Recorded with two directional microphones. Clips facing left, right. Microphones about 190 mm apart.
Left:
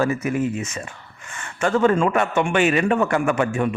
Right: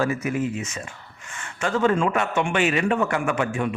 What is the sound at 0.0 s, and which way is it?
A man's voice, 45° left (ahead or behind).